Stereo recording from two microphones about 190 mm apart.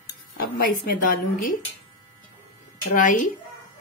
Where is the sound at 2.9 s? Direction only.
45° left (ahead or behind).